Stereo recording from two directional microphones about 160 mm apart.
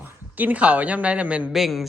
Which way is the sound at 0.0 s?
10° right (ahead or behind).